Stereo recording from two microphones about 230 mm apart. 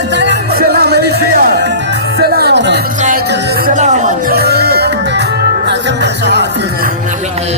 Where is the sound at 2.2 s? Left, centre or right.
Right.